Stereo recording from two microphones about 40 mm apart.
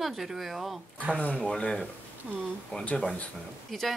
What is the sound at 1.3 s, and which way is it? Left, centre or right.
Speech, left.